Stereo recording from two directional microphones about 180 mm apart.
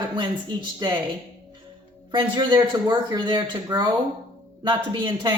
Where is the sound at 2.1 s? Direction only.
25° right (ahead or behind).